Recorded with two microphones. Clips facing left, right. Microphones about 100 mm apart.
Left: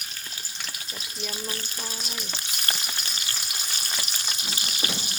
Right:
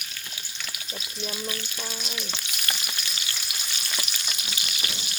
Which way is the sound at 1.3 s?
35° left (ahead or behind).